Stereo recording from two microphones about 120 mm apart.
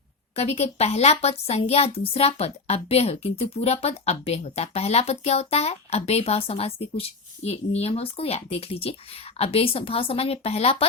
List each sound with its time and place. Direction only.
0.3 s a woman's voice: 60° left (ahead or behind)